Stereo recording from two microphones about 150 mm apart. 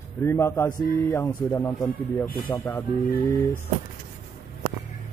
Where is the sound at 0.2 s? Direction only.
20° left (ahead or behind).